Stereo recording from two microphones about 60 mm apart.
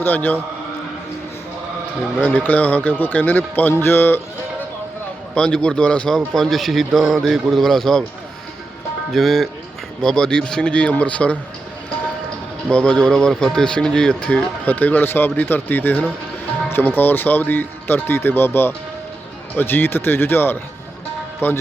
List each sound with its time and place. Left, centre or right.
0.0 s speech: left
2.2 s speech: left
5.3 s speech: centre
6.1 s speech: centre
9.1 s speech: centre; by 11.3 s left
12.6 s speech: centre
14.7 s speech: left